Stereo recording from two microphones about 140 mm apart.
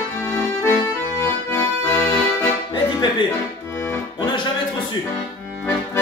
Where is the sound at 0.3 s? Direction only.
15° left (ahead or behind).